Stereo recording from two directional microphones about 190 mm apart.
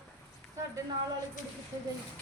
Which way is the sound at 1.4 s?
40° left (ahead or behind).